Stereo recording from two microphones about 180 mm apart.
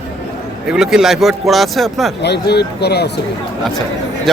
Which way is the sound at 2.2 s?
65° left (ahead or behind).